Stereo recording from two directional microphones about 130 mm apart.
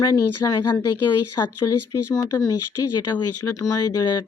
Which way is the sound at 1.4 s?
25° left (ahead or behind).